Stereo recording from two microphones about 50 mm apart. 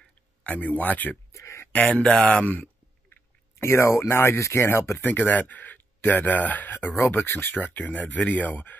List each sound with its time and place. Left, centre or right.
0.4 s speech: left
1.3 s speech: left
1.7 s speech: left
3.1 s speech: left
5.0 s speech: left